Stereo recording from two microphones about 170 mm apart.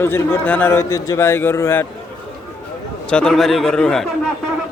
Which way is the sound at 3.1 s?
5° left (ahead or behind).